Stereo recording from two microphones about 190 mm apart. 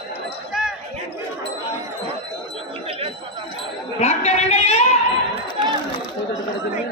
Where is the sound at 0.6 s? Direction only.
5° right (ahead or behind).